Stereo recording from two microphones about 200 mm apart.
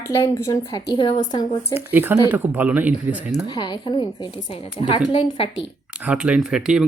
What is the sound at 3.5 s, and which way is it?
A woman's voice, 20° left (ahead or behind).